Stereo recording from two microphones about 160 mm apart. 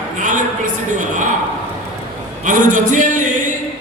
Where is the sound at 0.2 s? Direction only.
55° right (ahead or behind).